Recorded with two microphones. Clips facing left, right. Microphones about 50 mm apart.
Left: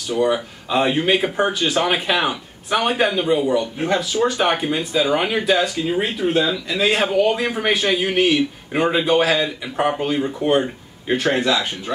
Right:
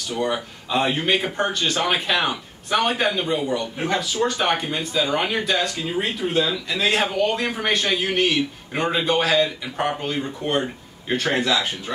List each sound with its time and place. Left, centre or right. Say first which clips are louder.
0.1 s speech: left 6 dB; centre